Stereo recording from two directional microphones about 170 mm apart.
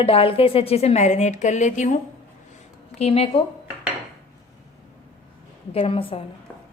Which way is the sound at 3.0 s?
35° left (ahead or behind).